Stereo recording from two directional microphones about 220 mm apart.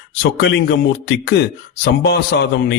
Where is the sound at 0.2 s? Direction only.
55° left (ahead or behind).